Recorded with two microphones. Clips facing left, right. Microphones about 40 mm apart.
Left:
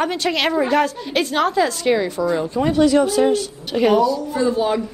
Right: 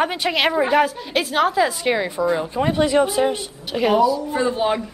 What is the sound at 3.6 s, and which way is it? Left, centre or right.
Speech, centre.